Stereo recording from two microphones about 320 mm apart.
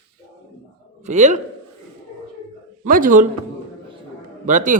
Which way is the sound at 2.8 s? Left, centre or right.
Right.